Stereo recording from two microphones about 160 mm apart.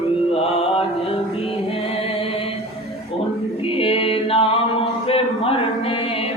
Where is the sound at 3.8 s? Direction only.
35° left (ahead or behind).